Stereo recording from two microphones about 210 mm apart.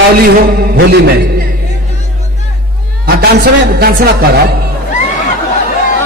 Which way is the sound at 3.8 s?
45° right (ahead or behind).